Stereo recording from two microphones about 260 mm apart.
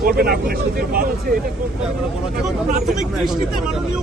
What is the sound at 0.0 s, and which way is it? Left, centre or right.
Speech, right.